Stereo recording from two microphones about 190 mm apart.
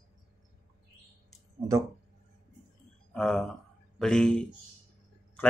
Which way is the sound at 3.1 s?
5° left (ahead or behind).